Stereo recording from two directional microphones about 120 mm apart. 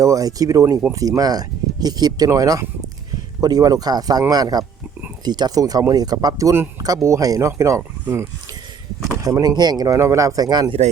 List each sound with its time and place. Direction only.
0.0 s speech: 30° right (ahead or behind)